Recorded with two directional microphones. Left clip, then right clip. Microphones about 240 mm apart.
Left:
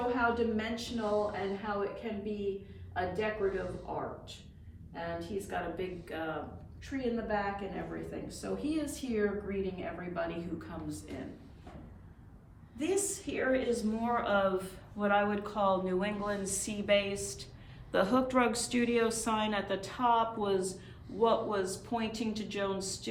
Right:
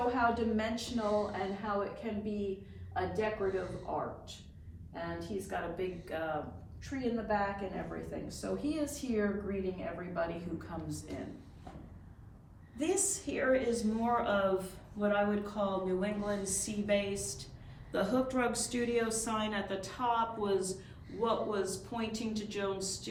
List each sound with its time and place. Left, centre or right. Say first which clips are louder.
0.1 s a woman's voice: left 1 dB; centre
1.0 s speech: left 1 dB; centre
1.3 s a woman's voice: even; centre
5.5 s a woman's voice: right 1 dB; centre
12.7 s a woman's voice: left 1 dB; centre
14.3 s speech: left 1 dB; centre
14.9 s a man's voice: left 2 dB; left